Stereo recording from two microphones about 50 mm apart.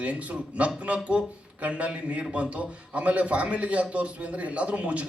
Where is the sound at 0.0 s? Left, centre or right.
Right.